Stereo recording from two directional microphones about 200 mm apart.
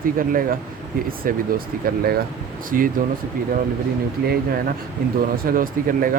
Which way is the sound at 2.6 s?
45° right (ahead or behind).